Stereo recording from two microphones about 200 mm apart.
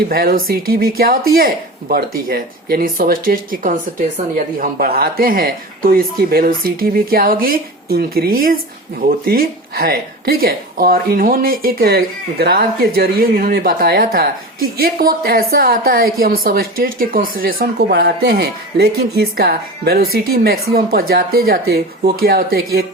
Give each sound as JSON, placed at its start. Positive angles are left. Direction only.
{"t": 0.1, "sound": "speech", "side_deg": -50}